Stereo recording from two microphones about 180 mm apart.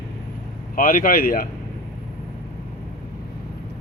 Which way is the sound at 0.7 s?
50° left (ahead or behind).